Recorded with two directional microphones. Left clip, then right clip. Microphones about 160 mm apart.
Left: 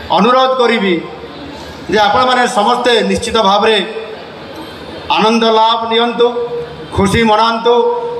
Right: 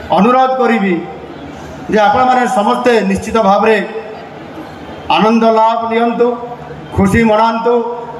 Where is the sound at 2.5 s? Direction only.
30° right (ahead or behind).